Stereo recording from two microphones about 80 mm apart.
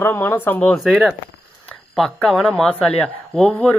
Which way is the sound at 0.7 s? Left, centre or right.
Centre.